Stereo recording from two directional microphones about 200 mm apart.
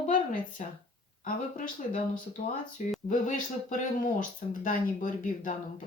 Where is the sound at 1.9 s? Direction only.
40° left (ahead or behind).